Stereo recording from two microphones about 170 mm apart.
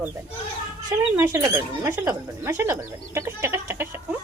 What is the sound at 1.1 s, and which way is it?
Speech, 15° right (ahead or behind).